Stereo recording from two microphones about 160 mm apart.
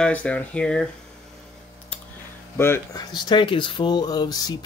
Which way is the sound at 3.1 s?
30° left (ahead or behind).